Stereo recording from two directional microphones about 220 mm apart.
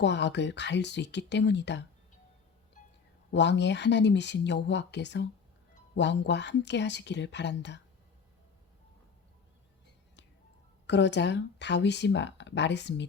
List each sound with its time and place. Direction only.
0.0 s speech: 55° left (ahead or behind)
3.3 s speech: 50° left (ahead or behind)
10.8 s speech: 50° left (ahead or behind)